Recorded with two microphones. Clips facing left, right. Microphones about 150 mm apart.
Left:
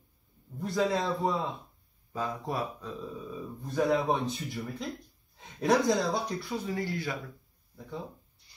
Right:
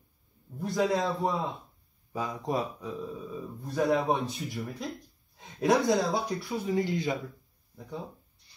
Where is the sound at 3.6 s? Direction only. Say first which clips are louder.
Right 1 dB; centre (ahead or behind).